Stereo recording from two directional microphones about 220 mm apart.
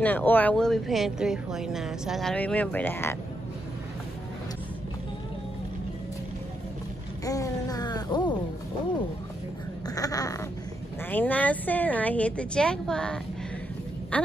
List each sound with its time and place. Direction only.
0.0 s a woman's voice: 10° left (ahead or behind)
7.2 s a sound: 15° left (ahead or behind)
9.8 s quack: 15° left (ahead or behind)
11.1 s a woman's voice: 5° left (ahead or behind)